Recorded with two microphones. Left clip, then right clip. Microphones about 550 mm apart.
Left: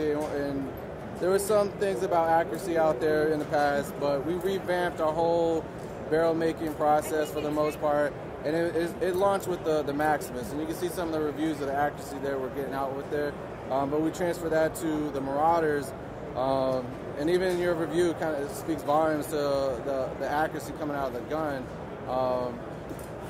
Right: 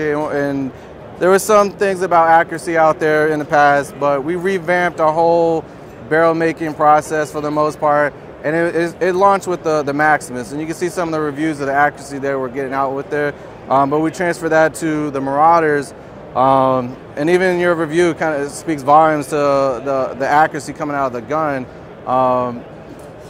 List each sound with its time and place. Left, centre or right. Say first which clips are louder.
0.0 s speech: right 11 dB; right
6.1 s speech: right 12 dB; right
16.3 s speech: right 15 dB; right